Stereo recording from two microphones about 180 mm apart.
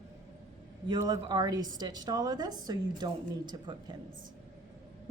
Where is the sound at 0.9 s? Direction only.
20° right (ahead or behind).